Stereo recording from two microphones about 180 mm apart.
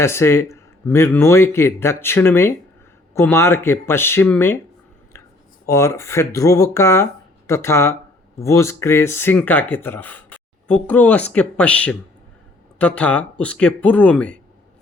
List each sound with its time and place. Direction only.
0.0 s speech: 15° left (ahead or behind)
5.6 s speech: 15° left (ahead or behind)